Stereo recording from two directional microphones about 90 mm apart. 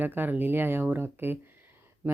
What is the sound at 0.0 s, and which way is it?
Speech, 20° right (ahead or behind).